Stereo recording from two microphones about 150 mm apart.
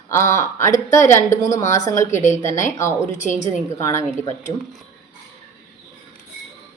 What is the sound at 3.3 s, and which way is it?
Speech, 50° left (ahead or behind).